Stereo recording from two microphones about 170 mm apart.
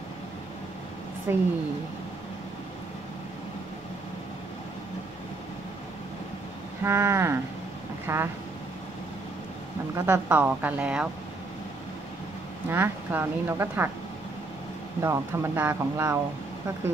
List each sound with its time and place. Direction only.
1.3 s speech: 15° right (ahead or behind)
6.8 s speech: 15° right (ahead or behind)
9.9 s speech: 10° right (ahead or behind)
12.6 s speech: 10° right (ahead or behind)
15.0 s speech: 15° right (ahead or behind)